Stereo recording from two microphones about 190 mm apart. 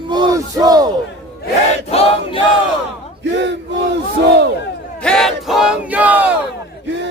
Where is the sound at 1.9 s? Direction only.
30° left (ahead or behind).